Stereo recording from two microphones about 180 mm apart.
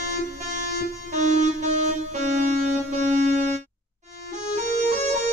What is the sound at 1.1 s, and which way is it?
Music, 40° right (ahead or behind).